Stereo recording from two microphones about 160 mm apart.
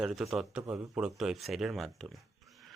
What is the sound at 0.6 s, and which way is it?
Speech, 15° right (ahead or behind).